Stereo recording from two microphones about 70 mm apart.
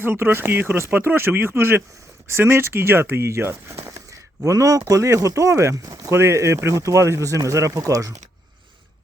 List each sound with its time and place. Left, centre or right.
0.0 s speech: right
6.1 s speech: right